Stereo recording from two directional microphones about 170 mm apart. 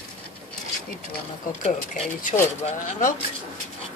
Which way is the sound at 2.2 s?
50° left (ahead or behind).